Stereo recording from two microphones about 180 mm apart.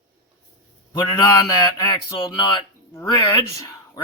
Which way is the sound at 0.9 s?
20° left (ahead or behind).